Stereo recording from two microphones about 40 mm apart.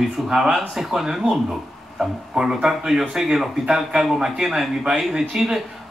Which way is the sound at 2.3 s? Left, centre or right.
Centre.